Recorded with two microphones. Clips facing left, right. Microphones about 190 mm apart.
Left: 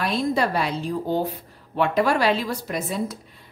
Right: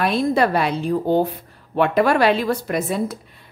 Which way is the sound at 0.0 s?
60° right (ahead or behind).